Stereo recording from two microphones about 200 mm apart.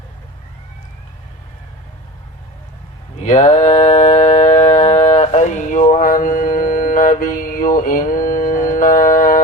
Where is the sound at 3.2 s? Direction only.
35° left (ahead or behind).